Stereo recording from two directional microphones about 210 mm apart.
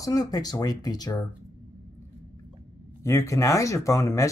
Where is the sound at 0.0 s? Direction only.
15° left (ahead or behind).